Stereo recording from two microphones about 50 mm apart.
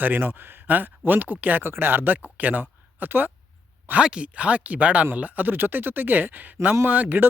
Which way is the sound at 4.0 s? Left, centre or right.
Centre.